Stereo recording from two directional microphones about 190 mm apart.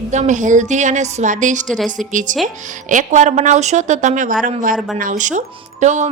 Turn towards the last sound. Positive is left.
turn(degrees=-40)  # may be behind; listen again after turning